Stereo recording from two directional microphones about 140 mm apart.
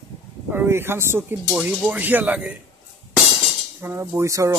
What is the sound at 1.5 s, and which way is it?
Speech, 5° right (ahead or behind).